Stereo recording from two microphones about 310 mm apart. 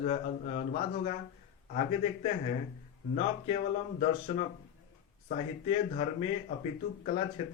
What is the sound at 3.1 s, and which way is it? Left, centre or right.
Speech, left.